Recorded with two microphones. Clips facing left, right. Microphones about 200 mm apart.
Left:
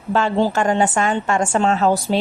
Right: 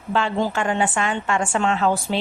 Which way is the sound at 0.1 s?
40° left (ahead or behind).